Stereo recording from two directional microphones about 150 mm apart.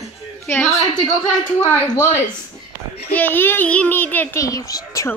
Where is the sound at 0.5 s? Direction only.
10° left (ahead or behind).